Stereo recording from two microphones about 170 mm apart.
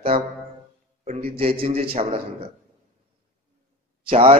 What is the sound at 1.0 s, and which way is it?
Mantra, 35° right (ahead or behind).